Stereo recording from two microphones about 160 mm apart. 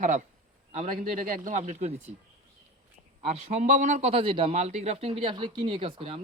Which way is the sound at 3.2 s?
45° right (ahead or behind).